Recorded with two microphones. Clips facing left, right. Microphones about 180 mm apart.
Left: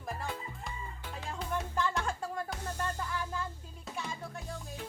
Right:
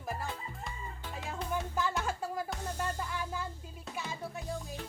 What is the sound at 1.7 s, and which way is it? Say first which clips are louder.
Music: even; 5° right (ahead or behind).